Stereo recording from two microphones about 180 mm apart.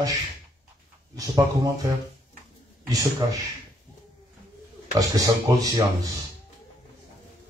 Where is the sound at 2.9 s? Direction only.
20° right (ahead or behind).